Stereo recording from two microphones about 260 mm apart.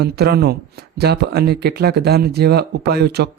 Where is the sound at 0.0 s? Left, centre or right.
Right.